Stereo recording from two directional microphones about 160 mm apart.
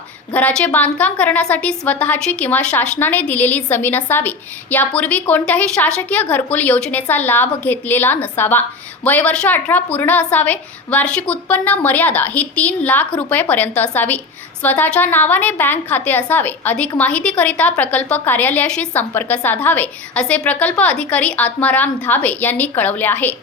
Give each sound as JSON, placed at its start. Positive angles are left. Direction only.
{"t": 0.3, "sound": "a woman's voice", "side_deg": 10}